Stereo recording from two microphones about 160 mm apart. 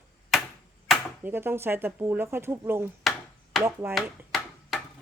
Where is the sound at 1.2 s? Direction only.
15° right (ahead or behind).